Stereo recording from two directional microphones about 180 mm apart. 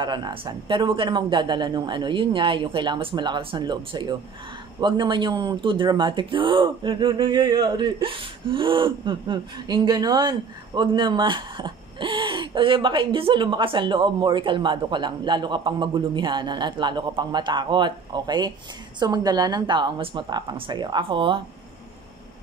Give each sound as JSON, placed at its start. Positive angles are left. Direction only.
{"t": 0.0, "sound": "speech", "side_deg": -25}